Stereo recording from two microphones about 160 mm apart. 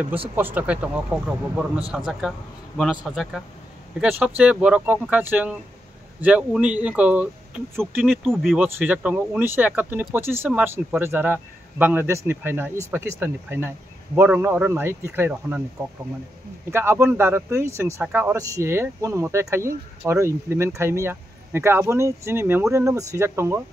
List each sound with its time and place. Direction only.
0.4 s speech: 10° right (ahead or behind)
8.6 s speech: 10° right (ahead or behind)
16.7 s speech: 15° right (ahead or behind)